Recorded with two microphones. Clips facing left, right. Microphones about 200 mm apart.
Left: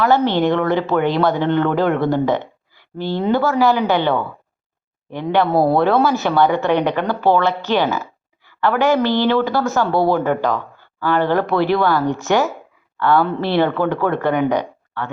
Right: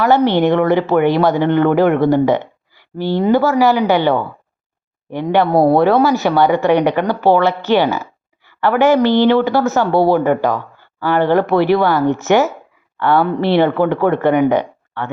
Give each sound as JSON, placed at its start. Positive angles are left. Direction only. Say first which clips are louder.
{"t": 0.0, "sound": "a woman's voice", "louder": "right 3 dB", "side_deg": -15}